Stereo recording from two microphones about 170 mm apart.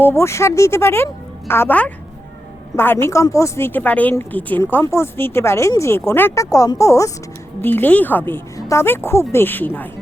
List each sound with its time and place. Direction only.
0.0 s a woman's voice: 15° left (ahead or behind)